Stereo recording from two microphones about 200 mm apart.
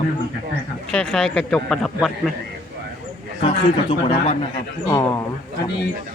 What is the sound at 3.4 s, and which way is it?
Speech, 30° left (ahead or behind).